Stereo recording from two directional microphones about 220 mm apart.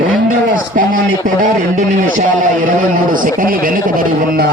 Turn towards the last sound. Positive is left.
turn(degrees=-40)  # may be behind; listen again after turning